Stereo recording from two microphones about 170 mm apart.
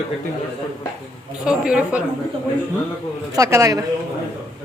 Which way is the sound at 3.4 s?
15° right (ahead or behind).